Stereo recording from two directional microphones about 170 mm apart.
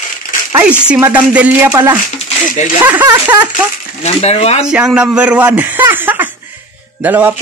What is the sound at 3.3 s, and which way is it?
Speech, 10° right (ahead or behind).